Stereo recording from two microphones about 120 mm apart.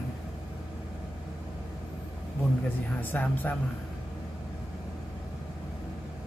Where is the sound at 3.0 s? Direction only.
15° left (ahead or behind).